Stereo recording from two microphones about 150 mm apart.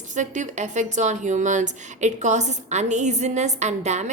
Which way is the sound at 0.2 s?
55° right (ahead or behind).